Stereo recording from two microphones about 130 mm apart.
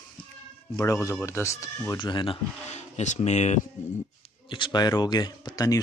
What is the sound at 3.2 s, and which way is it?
Speech, 60° left (ahead or behind).